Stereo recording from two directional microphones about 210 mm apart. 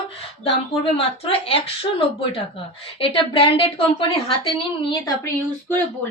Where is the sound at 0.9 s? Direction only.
25° left (ahead or behind).